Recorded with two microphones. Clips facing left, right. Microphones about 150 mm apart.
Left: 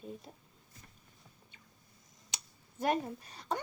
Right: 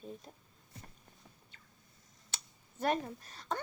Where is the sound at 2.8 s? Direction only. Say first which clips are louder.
Left 1 dB; 10° left (ahead or behind).